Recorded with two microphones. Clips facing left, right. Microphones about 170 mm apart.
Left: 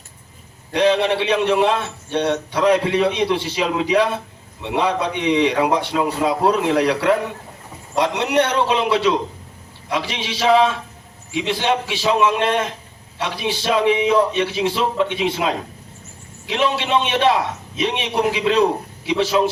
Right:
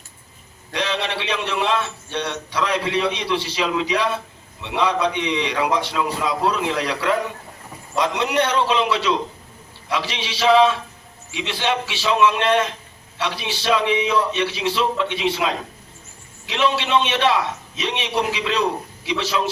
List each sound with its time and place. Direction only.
0.7 s a man's voice: 55° left (ahead or behind)